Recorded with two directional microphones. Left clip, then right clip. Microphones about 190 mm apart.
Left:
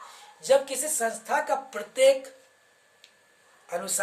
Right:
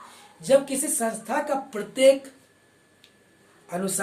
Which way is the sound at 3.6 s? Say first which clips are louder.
Right 2 dB; 15° left (ahead or behind).